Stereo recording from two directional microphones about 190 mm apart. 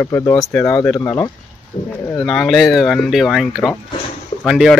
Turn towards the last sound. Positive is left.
turn(degrees=0)  # may be behind; listen again after turning